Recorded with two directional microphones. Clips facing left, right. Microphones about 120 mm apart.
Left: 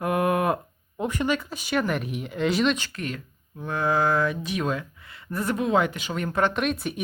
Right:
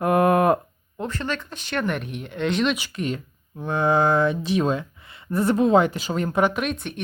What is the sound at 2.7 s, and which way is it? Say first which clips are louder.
Speech: right 5 dB; 15° right (ahead or behind).